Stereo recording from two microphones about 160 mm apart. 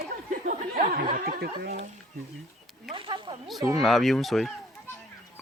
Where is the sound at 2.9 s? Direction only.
35° right (ahead or behind).